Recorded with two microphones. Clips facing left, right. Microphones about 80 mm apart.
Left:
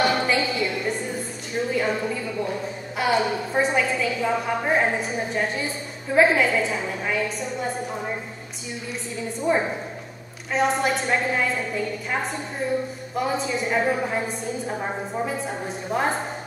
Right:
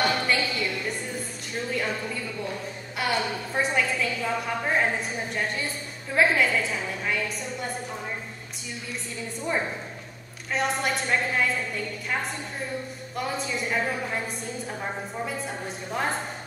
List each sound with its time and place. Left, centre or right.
0.0 s a sound: centre
3.6 s a woman's voice: centre
9.4 s a woman's voice: centre
10.5 s a woman's voice: centre
15.2 s a woman's voice: centre